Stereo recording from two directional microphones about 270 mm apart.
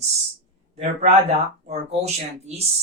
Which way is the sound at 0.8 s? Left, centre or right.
Right.